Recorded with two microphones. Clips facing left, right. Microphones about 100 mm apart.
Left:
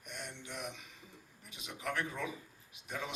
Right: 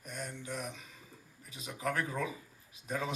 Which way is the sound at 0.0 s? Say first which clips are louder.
Right 4 dB; 40° right (ahead or behind).